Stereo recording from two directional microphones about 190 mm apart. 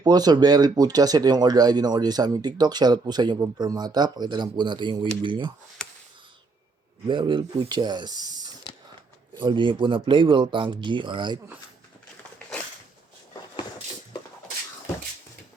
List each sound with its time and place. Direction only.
0.0 s speech: 20° right (ahead or behind)
7.1 s speech: 25° right (ahead or behind)